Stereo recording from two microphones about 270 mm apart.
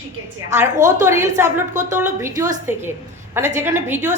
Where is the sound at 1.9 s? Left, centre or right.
Centre.